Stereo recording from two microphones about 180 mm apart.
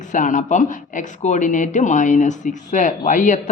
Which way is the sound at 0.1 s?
45° left (ahead or behind).